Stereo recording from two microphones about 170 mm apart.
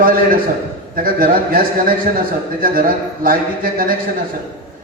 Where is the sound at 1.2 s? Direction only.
60° right (ahead or behind).